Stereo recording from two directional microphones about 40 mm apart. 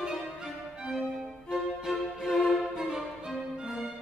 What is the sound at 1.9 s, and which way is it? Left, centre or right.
Music, centre.